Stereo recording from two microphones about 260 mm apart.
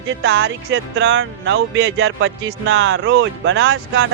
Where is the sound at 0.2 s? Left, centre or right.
Right.